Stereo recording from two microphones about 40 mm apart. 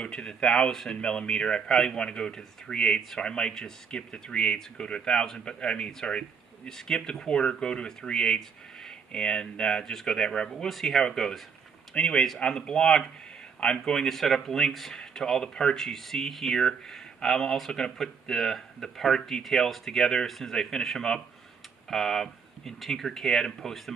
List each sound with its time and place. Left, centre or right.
0.1 s speech: centre
10.7 s speech: centre
11.9 s speech: left
12.4 s speech: centre
15.8 s speech: centre